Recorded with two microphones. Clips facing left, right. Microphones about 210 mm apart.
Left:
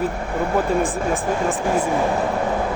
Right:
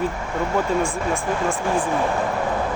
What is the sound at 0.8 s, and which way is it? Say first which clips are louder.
Speech: left 2 dB; 20° left (ahead or behind).